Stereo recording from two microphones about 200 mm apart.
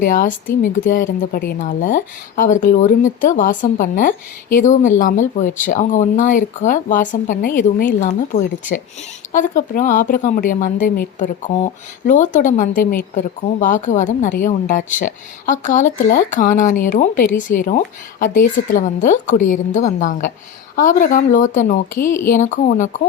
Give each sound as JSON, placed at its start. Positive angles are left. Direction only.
{"t": 0.0, "sound": "speech", "side_deg": 40}